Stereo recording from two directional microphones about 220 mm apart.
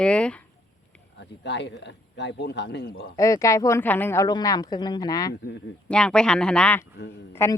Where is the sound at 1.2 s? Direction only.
50° left (ahead or behind).